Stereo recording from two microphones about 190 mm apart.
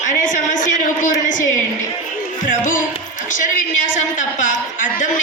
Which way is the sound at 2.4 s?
45° left (ahead or behind).